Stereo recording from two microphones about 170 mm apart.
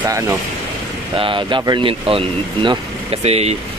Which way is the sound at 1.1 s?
30° right (ahead or behind).